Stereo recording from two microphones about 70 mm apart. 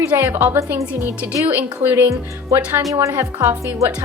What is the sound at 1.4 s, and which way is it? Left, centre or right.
Speech, right.